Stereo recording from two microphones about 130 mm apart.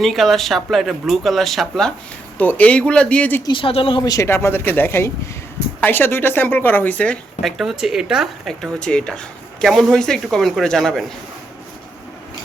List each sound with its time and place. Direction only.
0.0 s a woman's voice: centre (ahead or behind)
3.4 s speech: 40° left (ahead or behind)
4.1 s a woman's voice: 20° left (ahead or behind)
7.4 s speech: 5° right (ahead or behind)